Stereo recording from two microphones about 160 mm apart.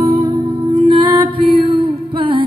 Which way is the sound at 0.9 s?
30° right (ahead or behind).